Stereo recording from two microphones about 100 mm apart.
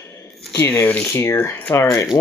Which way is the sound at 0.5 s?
25° left (ahead or behind).